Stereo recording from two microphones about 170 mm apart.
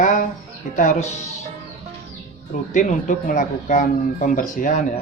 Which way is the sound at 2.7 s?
45° left (ahead or behind).